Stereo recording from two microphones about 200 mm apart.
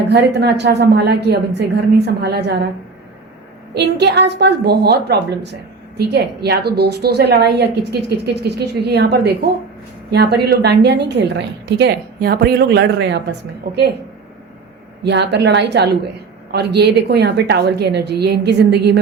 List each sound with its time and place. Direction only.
0.1 s a woman's voice: 55° right (ahead or behind)
3.8 s a woman's voice: 55° right (ahead or behind)
15.0 s a woman's voice: 60° right (ahead or behind)